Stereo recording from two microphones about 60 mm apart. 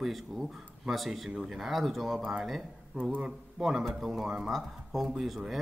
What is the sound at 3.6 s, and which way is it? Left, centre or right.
Speech, centre.